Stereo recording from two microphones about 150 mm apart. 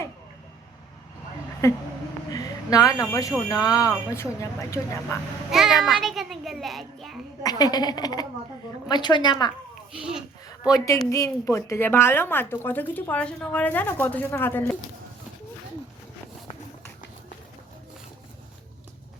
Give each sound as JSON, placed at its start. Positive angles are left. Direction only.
{"t": 1.6, "sound": "a woman's voice", "side_deg": 20}
{"t": 2.3, "sound": "a sound", "side_deg": 25}
{"t": 3.1, "sound": "a woman's voice", "side_deg": 20}
{"t": 5.5, "sound": "a child's voice", "side_deg": -5}
{"t": 7.4, "sound": "a woman's voice", "side_deg": 25}
{"t": 10.0, "sound": "a sound", "side_deg": -5}
{"t": 10.7, "sound": "a woman's voice", "side_deg": 25}